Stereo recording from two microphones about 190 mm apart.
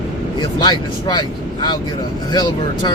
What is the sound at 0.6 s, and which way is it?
Speech, 20° left (ahead or behind).